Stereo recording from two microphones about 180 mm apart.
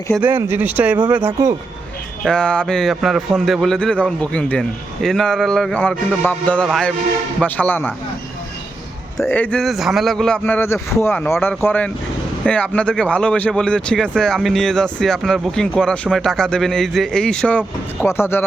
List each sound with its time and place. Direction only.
0.2 s speech: 10° right (ahead or behind)
2.2 s a man's voice: 5° left (ahead or behind)
9.1 s a man's voice: 10° left (ahead or behind)